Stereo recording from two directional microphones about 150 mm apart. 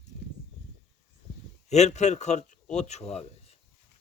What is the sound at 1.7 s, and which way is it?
A man's voice, 50° left (ahead or behind).